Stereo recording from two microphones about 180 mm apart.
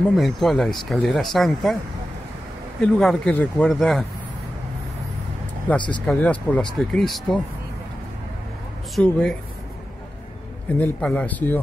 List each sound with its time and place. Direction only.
0.1 s a man's voice: centre (ahead or behind)
2.8 s a man's voice: 5° left (ahead or behind)
5.8 s speech: 25° left (ahead or behind)
6.0 s a man's voice: 10° left (ahead or behind)
8.9 s a man's voice: 5° left (ahead or behind)
10.8 s speech: 5° left (ahead or behind)